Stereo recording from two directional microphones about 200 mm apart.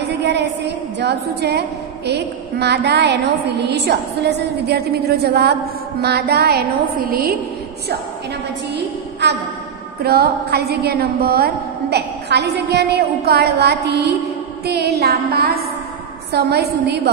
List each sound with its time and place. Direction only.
0.0 s a woman's voice: 55° right (ahead or behind)
8.7 s a sound: 55° right (ahead or behind)
10.0 s a woman's voice: 50° right (ahead or behind)